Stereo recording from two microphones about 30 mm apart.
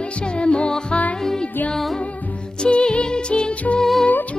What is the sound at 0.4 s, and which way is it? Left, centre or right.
Music, left.